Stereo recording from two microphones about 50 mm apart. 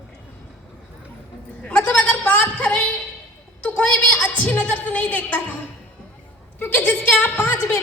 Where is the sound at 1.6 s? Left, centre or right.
Left.